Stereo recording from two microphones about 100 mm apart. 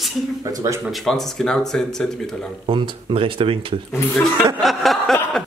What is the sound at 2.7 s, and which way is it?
Speech, 60° right (ahead or behind).